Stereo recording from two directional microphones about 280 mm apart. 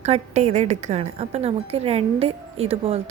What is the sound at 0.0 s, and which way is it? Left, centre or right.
A woman's voice, right.